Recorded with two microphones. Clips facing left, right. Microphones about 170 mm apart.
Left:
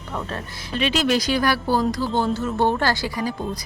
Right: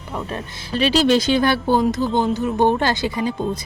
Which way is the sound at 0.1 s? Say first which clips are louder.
Right 2 dB; 15° right (ahead or behind).